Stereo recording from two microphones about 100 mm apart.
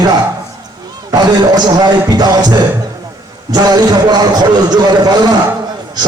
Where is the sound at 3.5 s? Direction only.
45° right (ahead or behind).